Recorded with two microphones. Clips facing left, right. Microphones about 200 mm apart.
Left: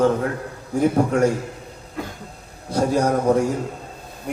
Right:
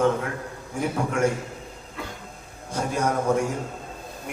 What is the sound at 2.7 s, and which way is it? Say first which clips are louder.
Speech: left 6 dB; 35° left (ahead or behind).